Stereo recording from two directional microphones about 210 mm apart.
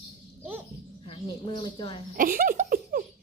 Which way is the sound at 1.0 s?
25° left (ahead or behind).